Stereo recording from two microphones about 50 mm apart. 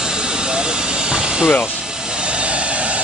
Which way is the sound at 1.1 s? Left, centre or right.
Centre.